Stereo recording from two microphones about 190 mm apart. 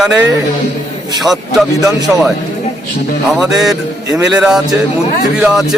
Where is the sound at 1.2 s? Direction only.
Centre (ahead or behind).